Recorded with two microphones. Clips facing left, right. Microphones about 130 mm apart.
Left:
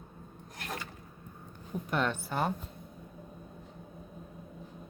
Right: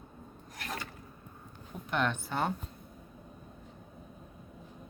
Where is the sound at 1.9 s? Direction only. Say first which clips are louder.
Even; 5° left (ahead or behind).